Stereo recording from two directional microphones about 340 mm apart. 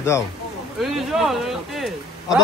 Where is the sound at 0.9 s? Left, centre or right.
Centre.